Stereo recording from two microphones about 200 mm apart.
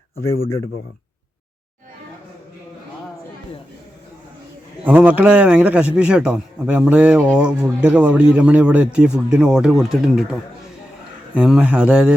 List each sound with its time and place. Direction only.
4.9 s a man's voice: 5° right (ahead or behind)
11.3 s a man's voice: 5° right (ahead or behind)